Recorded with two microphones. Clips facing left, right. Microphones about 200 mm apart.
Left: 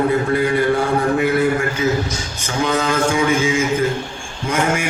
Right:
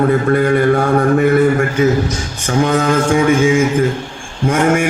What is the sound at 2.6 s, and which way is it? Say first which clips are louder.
Mantra: right 3 dB; 55° right (ahead or behind).